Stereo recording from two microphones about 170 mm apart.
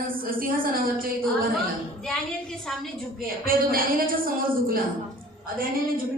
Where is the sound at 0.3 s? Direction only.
55° right (ahead or behind).